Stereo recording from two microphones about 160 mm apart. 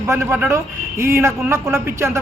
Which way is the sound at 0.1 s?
15° right (ahead or behind).